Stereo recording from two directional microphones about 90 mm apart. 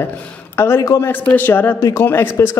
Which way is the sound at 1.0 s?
20° left (ahead or behind).